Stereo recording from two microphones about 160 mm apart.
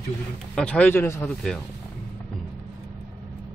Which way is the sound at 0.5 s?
10° left (ahead or behind).